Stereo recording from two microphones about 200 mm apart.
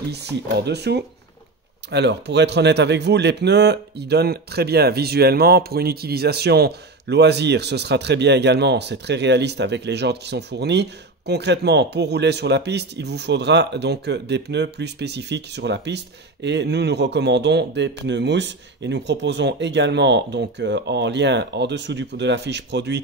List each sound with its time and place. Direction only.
0.1 s a man's voice: 55° right (ahead or behind)